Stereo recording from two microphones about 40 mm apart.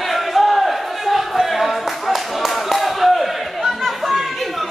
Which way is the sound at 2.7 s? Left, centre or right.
Centre.